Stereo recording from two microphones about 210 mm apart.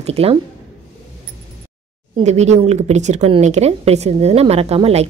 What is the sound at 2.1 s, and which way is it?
A woman's voice, 30° right (ahead or behind).